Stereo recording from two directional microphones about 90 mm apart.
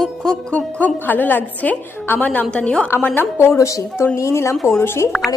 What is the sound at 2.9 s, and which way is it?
A woman's voice, 25° left (ahead or behind).